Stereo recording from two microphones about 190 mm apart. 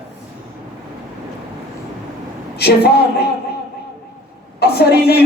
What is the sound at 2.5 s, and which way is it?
Speech, 55° left (ahead or behind).